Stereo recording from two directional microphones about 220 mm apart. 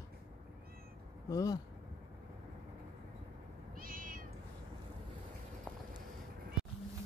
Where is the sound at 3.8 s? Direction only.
40° right (ahead or behind).